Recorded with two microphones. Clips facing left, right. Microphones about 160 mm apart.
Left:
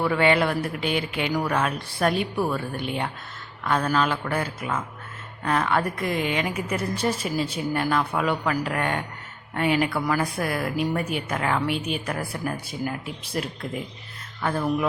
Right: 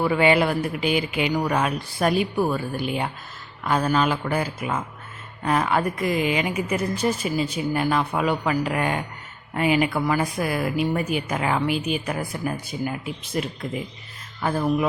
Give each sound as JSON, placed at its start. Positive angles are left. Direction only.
{"t": 0.0, "sound": "a woman's voice", "side_deg": -10}
{"t": 6.9, "sound": "a woman's voice", "side_deg": 30}
{"t": 7.7, "sound": "a woman's voice", "side_deg": -5}